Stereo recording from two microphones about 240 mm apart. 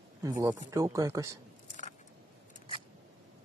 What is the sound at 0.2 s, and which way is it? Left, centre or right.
Speech, centre.